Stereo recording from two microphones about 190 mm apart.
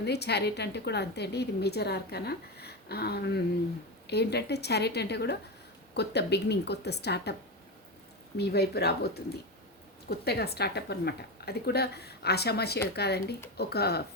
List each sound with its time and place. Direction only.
0.0 s a woman's voice: 60° left (ahead or behind)
8.4 s a woman's voice: 60° left (ahead or behind)
10.2 s a woman's voice: 60° left (ahead or behind)